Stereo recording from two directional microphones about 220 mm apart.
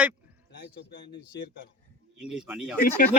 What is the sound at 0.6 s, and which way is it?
Speech, 50° left (ahead or behind).